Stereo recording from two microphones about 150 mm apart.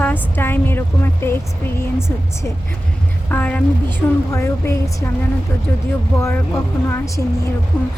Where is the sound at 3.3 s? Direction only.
10° left (ahead or behind).